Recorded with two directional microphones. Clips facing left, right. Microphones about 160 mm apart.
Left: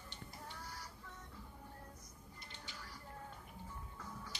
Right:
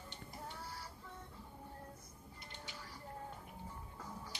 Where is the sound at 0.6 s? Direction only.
30° right (ahead or behind).